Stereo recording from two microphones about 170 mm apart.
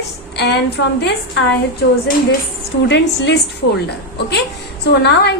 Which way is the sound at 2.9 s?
90° left.